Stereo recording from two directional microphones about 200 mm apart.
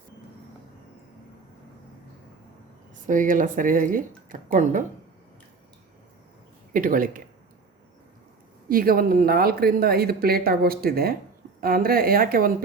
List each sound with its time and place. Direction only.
3.1 s speech: 40° right (ahead or behind)
6.7 s speech: 45° right (ahead or behind)
8.7 s speech: 45° right (ahead or behind)